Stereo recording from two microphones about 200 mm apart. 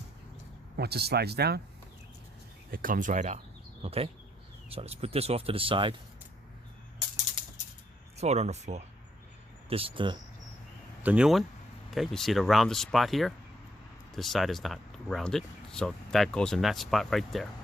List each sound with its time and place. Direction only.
0.8 s speech: 55° right (ahead or behind)
2.6 s speech: 45° right (ahead or behind); by 5.9 s 25° right (ahead or behind)
8.2 s speech: 35° right (ahead or behind)
11.0 s speech: 5° right (ahead or behind)